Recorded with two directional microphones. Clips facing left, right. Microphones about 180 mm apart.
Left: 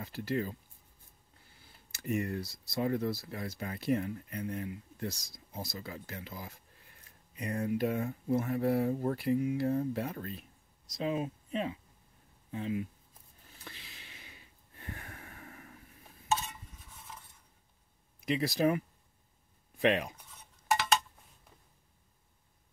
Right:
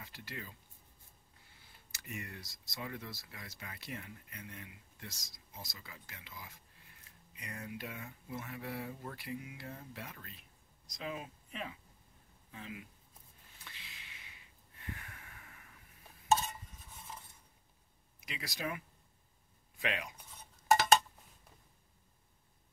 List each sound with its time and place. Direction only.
0.0 s speech: 40° left (ahead or behind)
2.0 s speech: 40° left (ahead or behind)
11.0 s speech: 30° left (ahead or behind)
13.6 s a sound: 40° left (ahead or behind)
16.3 s a sound: 40° right (ahead or behind)
18.6 s speech: 40° left (ahead or behind)
19.9 s speech: 35° left (ahead or behind)
20.7 s tick-tock: 40° right (ahead or behind)